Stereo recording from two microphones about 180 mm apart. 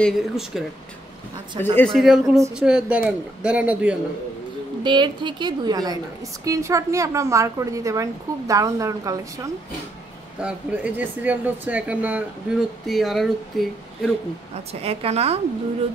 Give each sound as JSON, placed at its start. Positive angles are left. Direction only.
{"t": 0.0, "sound": "speech", "side_deg": 0}
{"t": 1.6, "sound": "a woman's voice", "side_deg": -25}
{"t": 1.9, "sound": "speech", "side_deg": 0}
{"t": 2.2, "sound": "a woman's voice", "side_deg": -15}
{"t": 2.5, "sound": "a woman's voice", "side_deg": -5}
{"t": 4.8, "sound": "a woman's voice", "side_deg": -25}
{"t": 14.7, "sound": "a woman's voice", "side_deg": -35}